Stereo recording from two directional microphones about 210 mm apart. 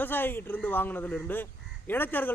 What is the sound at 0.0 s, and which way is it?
Speech, 10° left (ahead or behind).